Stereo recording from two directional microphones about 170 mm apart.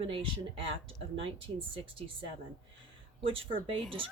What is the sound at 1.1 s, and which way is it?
Speech, 30° right (ahead or behind).